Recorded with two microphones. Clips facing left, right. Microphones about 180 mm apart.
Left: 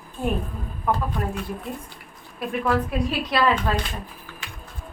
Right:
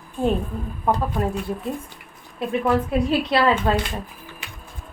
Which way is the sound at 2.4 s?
25° right (ahead or behind).